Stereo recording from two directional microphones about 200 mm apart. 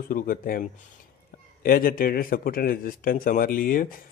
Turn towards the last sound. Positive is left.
turn(degrees=45)  # may be behind; listen again after turning